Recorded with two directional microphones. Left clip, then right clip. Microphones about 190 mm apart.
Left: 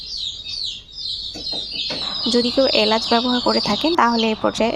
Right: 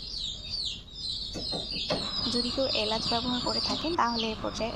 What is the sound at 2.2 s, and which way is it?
Speech, 45° left (ahead or behind).